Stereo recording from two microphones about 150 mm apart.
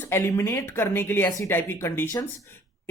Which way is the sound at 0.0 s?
15° left (ahead or behind).